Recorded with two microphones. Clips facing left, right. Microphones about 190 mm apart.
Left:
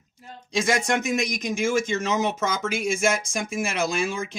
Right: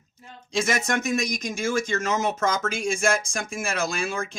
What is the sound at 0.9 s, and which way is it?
Speech, 20° left (ahead or behind).